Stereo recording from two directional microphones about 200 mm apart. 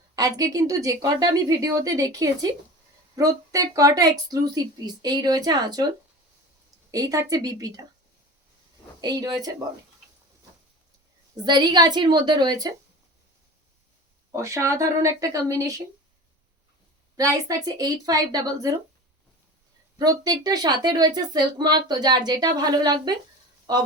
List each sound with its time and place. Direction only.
0.2 s a woman's voice: 15° right (ahead or behind)
6.9 s a woman's voice: 15° right (ahead or behind)
9.0 s speech: 20° right (ahead or behind)
11.4 s speech: 20° right (ahead or behind)
14.3 s a woman's voice: 15° right (ahead or behind)
17.2 s speech: 15° right (ahead or behind)
20.0 s speech: 20° right (ahead or behind)